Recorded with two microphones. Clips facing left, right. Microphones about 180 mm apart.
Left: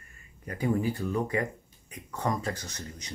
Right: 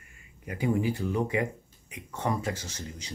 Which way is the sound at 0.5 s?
15° right (ahead or behind).